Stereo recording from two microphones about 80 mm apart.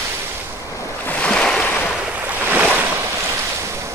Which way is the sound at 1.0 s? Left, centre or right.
Centre.